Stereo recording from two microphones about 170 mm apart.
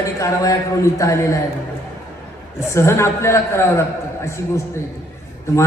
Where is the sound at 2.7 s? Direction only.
15° left (ahead or behind).